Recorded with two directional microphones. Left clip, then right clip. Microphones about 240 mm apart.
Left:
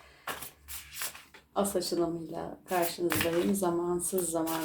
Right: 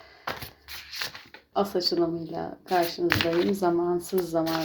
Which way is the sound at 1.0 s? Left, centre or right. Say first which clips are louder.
Right 6 dB; right.